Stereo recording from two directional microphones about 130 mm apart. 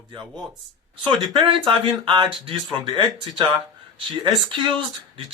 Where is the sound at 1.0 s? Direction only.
40° right (ahead or behind).